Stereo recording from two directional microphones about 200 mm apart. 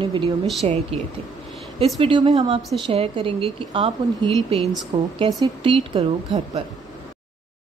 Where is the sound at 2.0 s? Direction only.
25° right (ahead or behind).